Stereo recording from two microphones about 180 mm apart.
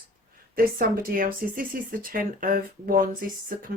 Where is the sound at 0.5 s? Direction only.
55° right (ahead or behind).